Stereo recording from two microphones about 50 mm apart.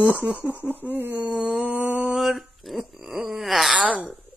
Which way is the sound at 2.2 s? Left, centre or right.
Centre.